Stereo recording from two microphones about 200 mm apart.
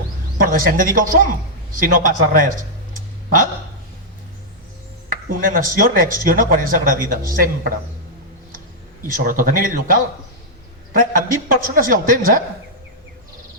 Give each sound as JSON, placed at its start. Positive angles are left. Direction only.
{"t": 0.4, "sound": "speech", "side_deg": -45}
{"t": 2.4, "sound": "a sound", "side_deg": -45}
{"t": 5.4, "sound": "speech", "side_deg": -45}
{"t": 9.1, "sound": "speech", "side_deg": -45}